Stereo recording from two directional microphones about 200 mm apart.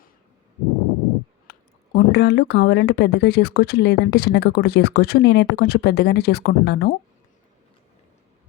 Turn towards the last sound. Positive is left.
turn(degrees=50)  # may be behind; listen again after turning